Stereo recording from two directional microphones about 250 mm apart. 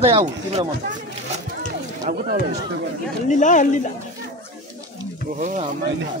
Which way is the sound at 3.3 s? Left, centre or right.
Left.